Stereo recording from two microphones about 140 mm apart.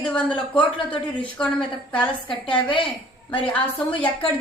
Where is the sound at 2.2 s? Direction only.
35° left (ahead or behind).